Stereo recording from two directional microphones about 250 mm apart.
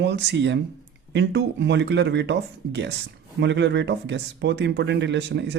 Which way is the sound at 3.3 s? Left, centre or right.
Right.